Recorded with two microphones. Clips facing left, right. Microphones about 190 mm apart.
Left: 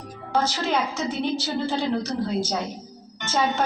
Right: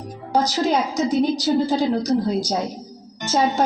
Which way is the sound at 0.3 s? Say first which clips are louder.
Right 4 dB; 40° right (ahead or behind).